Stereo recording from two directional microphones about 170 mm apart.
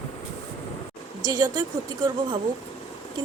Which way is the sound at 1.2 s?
20° right (ahead or behind).